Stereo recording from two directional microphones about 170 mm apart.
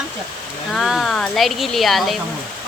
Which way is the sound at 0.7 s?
Centre (ahead or behind).